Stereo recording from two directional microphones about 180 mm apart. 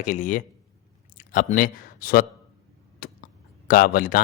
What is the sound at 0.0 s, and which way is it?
Speech, 45° left (ahead or behind).